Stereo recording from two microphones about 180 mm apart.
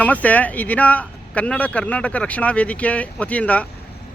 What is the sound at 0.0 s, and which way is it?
Speech, 10° left (ahead or behind).